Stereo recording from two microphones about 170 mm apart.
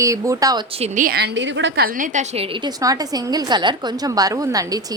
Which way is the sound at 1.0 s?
70° right (ahead or behind).